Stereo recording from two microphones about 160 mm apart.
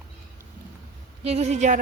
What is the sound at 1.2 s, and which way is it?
Speech, 40° right (ahead or behind).